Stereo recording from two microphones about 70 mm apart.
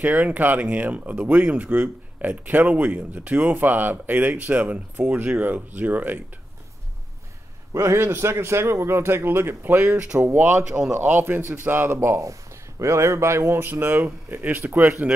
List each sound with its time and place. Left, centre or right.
0.0 s speech: right
7.7 s speech: right
12.2 s speech: right